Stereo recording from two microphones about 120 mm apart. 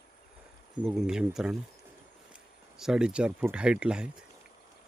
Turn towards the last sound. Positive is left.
turn(degrees=-10)  # may be behind; listen again after turning